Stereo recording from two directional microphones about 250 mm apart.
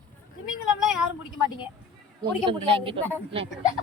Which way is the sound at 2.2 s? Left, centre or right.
Right.